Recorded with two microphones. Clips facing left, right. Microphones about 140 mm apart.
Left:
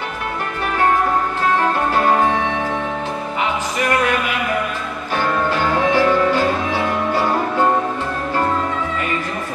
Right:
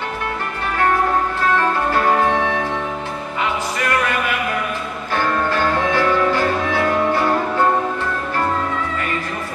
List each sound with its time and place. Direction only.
5.1 s music: 15° left (ahead or behind)